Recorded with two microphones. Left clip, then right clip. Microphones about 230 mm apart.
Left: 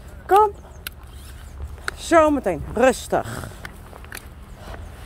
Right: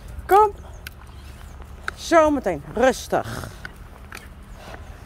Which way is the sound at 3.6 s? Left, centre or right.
Left.